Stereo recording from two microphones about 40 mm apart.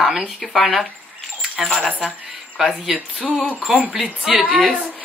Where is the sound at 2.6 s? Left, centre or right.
Centre.